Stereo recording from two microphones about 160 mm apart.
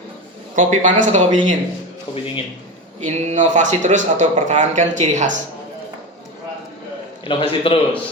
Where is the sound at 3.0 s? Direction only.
50° right (ahead or behind).